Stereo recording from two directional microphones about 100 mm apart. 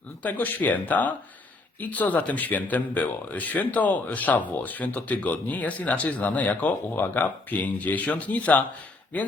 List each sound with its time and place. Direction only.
0.2 s speech: 15° left (ahead or behind)